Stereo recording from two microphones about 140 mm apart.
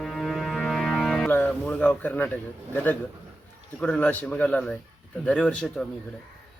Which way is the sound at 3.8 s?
10° left (ahead or behind).